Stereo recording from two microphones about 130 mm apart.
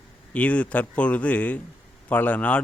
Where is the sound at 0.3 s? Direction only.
10° left (ahead or behind).